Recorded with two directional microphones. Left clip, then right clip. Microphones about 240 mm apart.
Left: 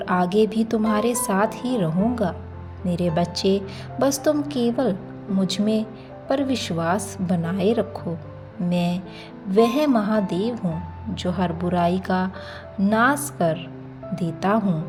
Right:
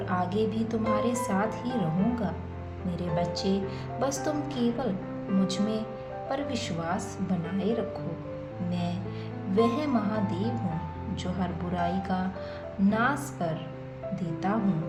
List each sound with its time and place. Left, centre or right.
0.0 s a woman's voice: left